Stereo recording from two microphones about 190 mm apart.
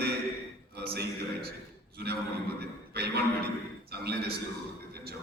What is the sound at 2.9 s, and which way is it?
A man's voice, 55° right (ahead or behind).